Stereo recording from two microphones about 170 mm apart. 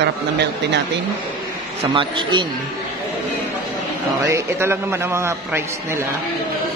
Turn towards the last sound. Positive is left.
turn(degrees=-15)  # may be behind; listen again after turning